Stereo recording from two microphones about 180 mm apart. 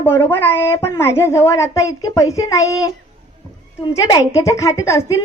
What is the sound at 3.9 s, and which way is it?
A woman's voice, 20° left (ahead or behind).